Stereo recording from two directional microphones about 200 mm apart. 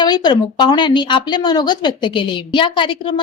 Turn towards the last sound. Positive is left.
turn(degrees=25)  # may be behind; listen again after turning